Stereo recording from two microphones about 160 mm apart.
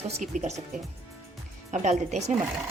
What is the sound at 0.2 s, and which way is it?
Speech, 45° right (ahead or behind).